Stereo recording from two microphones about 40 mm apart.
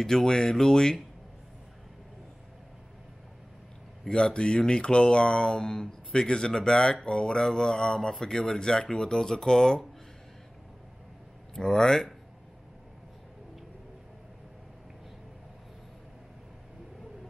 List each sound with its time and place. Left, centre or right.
0.0 s speech: centre
4.1 s speech: left
11.5 s speech: centre